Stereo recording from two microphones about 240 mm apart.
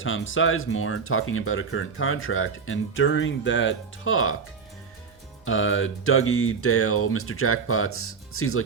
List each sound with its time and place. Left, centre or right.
0.0 s speech: left
5.5 s speech: left